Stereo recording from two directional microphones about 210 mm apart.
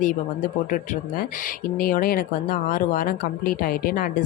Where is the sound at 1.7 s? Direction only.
40° left (ahead or behind).